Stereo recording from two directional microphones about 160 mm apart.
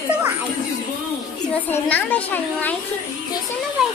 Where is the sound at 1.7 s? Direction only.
10° left (ahead or behind).